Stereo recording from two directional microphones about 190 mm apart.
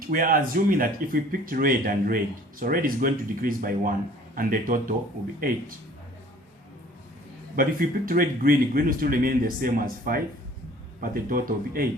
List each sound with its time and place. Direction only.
0.1 s speech: 50° right (ahead or behind)
7.5 s speech: 50° right (ahead or behind)